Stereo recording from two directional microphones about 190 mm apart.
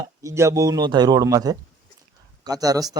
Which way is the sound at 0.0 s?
15° right (ahead or behind).